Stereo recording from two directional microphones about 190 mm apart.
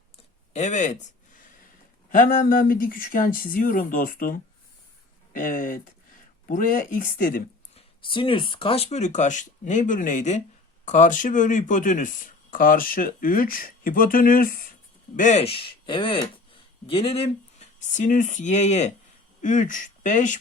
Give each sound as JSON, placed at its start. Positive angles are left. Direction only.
{"t": 0.5, "sound": "speech", "side_deg": 40}
{"t": 7.8, "sound": "speech", "side_deg": 25}